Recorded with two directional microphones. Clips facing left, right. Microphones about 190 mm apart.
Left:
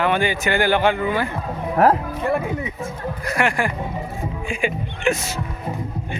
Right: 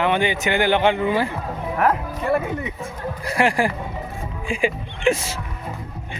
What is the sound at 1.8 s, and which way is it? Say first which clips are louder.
Speech: left 4 dB; 40° left (ahead or behind).